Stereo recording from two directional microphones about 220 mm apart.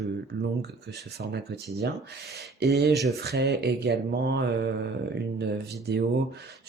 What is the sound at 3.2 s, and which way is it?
Speech, 50° right (ahead or behind).